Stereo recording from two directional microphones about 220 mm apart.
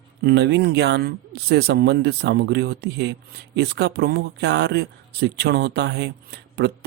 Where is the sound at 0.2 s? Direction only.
50° right (ahead or behind).